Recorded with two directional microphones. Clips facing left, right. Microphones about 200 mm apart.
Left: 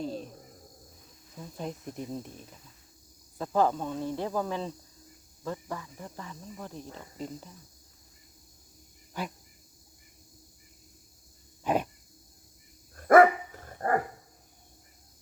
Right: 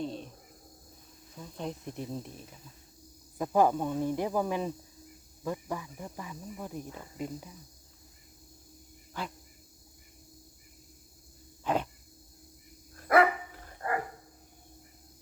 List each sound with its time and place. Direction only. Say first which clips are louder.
0.0 s cricket: left 1 dB; centre (ahead or behind)
1.4 s speech: even; 5° left (ahead or behind)
3.3 s speech: right 1 dB; 15° right (ahead or behind)
11.6 s a sound: left 2 dB; 15° left (ahead or behind)
13.0 s dog: left 6 dB; 45° left (ahead or behind)